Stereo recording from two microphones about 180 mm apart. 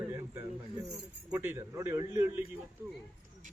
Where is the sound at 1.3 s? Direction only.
10° right (ahead or behind).